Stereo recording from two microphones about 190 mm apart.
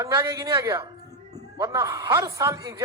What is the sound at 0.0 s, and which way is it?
A man's voice, 15° right (ahead or behind).